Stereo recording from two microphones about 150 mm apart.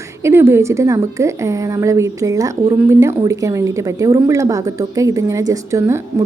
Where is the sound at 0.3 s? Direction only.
15° right (ahead or behind).